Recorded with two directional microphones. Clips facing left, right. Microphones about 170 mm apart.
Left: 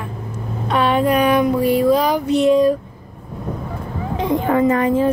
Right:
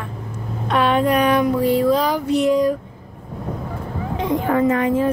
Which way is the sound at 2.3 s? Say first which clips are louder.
Left 3 dB; 25° left (ahead or behind).